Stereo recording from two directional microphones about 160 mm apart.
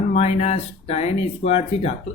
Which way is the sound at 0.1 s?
45° left (ahead or behind).